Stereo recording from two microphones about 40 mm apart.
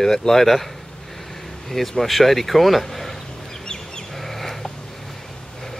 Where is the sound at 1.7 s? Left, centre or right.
Centre.